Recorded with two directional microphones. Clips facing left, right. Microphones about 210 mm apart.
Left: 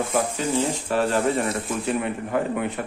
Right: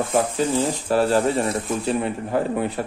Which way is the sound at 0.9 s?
35° right (ahead or behind).